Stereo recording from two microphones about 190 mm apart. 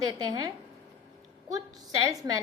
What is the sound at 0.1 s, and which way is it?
Speech, 20° right (ahead or behind).